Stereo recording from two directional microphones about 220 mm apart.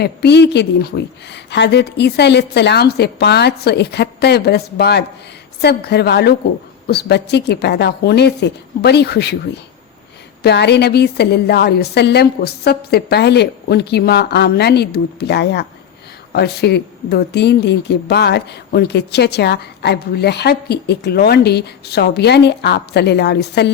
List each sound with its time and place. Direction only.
0.0 s speech: 50° left (ahead or behind)
10.4 s speech: 50° left (ahead or behind)